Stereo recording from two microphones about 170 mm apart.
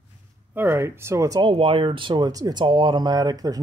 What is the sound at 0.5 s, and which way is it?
Speech, 15° right (ahead or behind).